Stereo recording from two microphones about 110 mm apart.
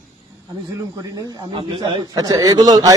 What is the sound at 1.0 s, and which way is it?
Speech, 35° right (ahead or behind).